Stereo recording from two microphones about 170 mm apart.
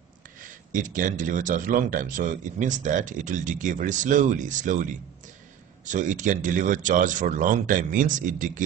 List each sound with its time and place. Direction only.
0.4 s a man's voice: 50° right (ahead or behind)